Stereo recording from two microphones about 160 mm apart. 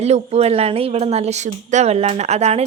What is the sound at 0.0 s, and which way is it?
Speech, 40° right (ahead or behind).